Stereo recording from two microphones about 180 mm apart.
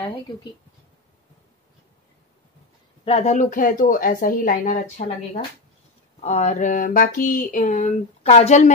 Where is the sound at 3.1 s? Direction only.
40° left (ahead or behind).